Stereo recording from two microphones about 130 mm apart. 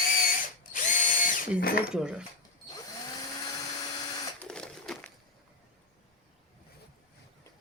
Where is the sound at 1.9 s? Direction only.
5° right (ahead or behind).